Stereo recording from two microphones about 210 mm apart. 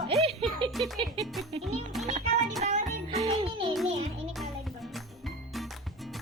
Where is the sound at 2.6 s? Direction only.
35° right (ahead or behind).